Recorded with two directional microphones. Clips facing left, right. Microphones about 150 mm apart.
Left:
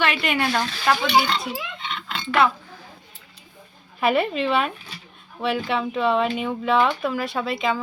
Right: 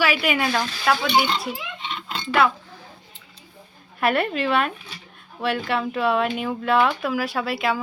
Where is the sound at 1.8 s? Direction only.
25° right (ahead or behind).